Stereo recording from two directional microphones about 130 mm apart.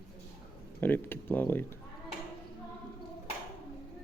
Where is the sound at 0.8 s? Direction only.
15° left (ahead or behind).